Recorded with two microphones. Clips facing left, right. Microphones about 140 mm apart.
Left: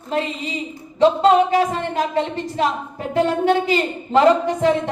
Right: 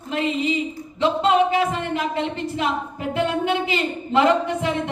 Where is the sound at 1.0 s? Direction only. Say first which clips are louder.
Left 4 dB; 40° left (ahead or behind).